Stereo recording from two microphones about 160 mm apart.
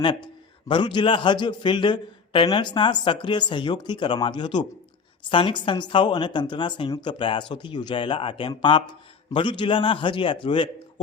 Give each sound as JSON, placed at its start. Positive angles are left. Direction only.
{"t": 0.7, "sound": "a man's voice", "side_deg": 30}